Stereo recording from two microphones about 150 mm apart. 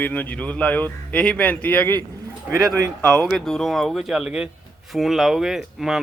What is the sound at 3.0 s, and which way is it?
Speech, centre (ahead or behind).